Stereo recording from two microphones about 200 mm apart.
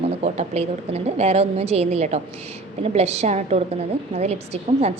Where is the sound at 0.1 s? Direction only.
35° right (ahead or behind).